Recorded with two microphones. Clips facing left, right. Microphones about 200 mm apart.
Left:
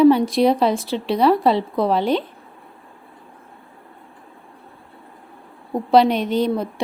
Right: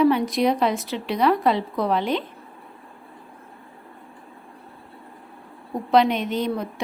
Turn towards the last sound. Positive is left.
turn(degrees=35)  # may be behind; listen again after turning